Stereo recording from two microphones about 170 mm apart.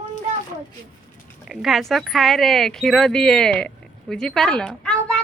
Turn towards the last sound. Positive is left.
turn(degrees=5)  # may be behind; listen again after turning